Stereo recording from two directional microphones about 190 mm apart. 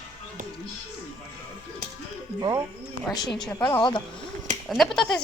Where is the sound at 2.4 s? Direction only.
20° right (ahead or behind).